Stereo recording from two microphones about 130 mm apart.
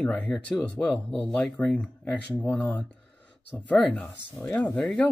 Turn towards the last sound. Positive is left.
turn(degrees=5)  # may be behind; listen again after turning